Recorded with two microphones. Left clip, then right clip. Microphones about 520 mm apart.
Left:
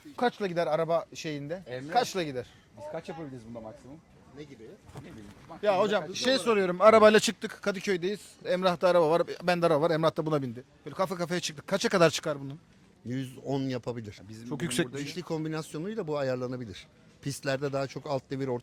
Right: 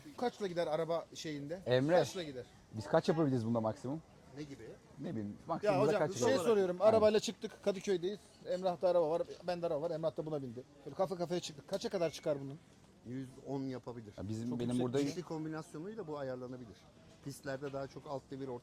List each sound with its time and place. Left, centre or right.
0.2 s a man's voice: left
2.1 s a man's voice: left
2.9 s speech: right
5.6 s a man's voice: left
13.1 s speech: left
14.8 s speech: left
15.2 s speech: left